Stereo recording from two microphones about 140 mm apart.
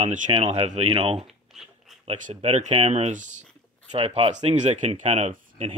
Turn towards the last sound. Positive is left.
turn(degrees=-50)  # may be behind; listen again after turning